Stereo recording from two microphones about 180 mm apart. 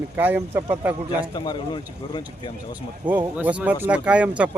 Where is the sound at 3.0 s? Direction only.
10° right (ahead or behind).